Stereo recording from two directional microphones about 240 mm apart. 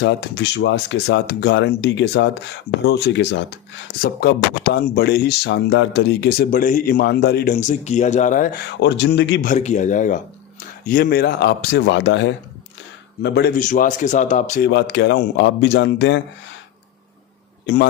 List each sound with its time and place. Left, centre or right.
0.0 s speech: left
9.5 s speech: left
14.7 s speech: left